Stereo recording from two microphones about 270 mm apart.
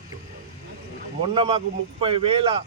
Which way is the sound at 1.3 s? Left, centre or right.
Right.